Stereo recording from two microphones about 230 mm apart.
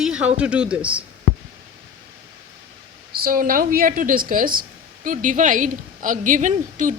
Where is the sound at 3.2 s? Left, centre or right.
Right.